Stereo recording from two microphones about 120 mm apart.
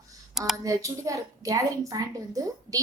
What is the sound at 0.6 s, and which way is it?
A woman's voice, 30° right (ahead or behind).